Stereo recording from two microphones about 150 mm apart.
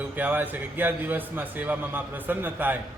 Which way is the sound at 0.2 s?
10° right (ahead or behind).